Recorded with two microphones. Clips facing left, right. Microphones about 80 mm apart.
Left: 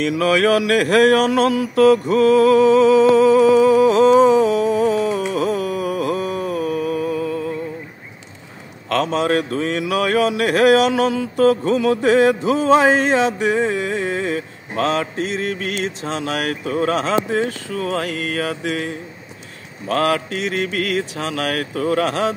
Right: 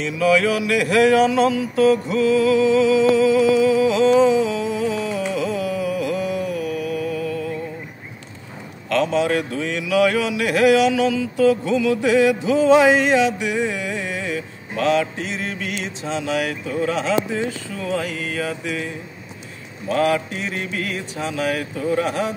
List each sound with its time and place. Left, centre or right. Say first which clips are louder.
0.0 s a sound: left 1 dB; left
5.1 s music: left 3 dB; left
8.8 s speech: even; left
19.9 s speech: left 1 dB; left